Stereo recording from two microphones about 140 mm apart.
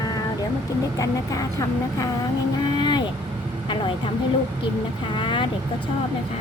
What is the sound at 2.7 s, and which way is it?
Vehicle, 30° left (ahead or behind).